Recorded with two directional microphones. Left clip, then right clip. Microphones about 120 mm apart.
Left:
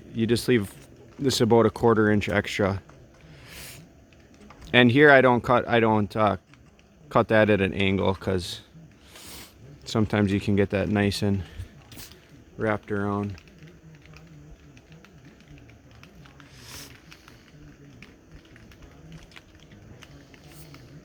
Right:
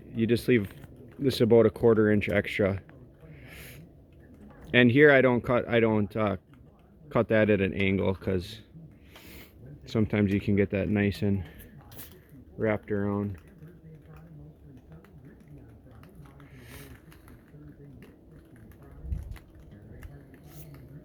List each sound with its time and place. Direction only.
0.2 s speech: 50° left (ahead or behind)
3.4 s a sound: 50° left (ahead or behind)
4.7 s speech: 50° left (ahead or behind)
9.9 s speech: 45° left (ahead or behind)
12.5 s speech: 25° left (ahead or behind)
16.6 s a sound: 40° left (ahead or behind)